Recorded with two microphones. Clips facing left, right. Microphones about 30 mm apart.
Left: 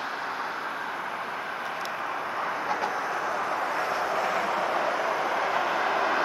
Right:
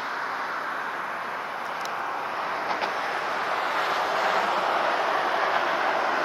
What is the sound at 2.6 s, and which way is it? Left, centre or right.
Vehicle, right.